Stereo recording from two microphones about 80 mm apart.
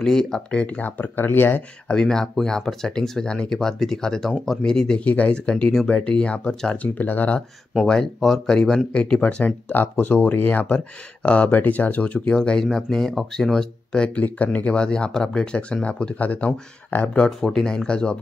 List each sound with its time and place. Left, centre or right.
0.0 s speech: centre; by 1.6 s left
1.9 s speech: centre
7.8 s speech: centre